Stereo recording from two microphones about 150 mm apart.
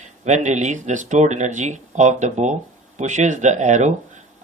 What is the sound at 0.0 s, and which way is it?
Speech, 50° right (ahead or behind).